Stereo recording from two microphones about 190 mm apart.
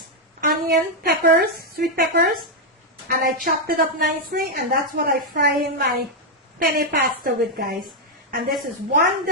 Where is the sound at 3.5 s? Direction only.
50° right (ahead or behind).